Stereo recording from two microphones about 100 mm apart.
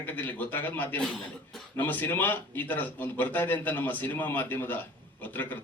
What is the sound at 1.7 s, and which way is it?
Speech, 20° left (ahead or behind).